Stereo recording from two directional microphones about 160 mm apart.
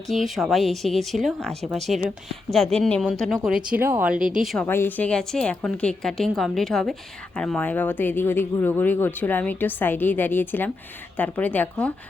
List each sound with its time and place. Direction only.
0.1 s speech: centre (ahead or behind)
4.2 s speech: 55° right (ahead or behind)
4.6 s speech: 15° left (ahead or behind)